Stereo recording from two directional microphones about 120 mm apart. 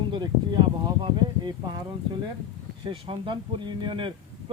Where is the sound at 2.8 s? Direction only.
45° right (ahead or behind).